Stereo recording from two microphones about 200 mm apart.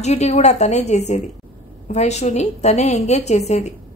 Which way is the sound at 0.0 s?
35° left (ahead or behind).